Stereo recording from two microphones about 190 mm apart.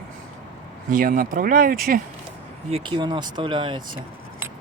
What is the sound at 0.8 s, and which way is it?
Speech, 45° right (ahead or behind).